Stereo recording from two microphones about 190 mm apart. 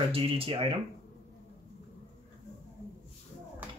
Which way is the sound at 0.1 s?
30° right (ahead or behind).